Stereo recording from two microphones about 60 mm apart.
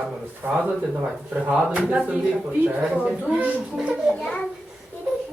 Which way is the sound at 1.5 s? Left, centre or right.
Right.